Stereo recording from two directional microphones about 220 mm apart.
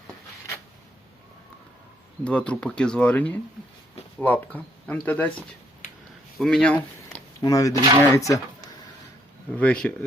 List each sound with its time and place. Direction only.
2.2 s speech: 5° left (ahead or behind)
5.8 s a sound: 35° left (ahead or behind)
6.4 s speech: 5° left (ahead or behind)
9.5 s speech: 5° left (ahead or behind)